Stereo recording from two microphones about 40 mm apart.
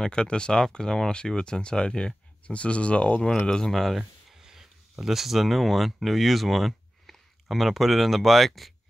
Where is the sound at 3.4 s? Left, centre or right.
Left.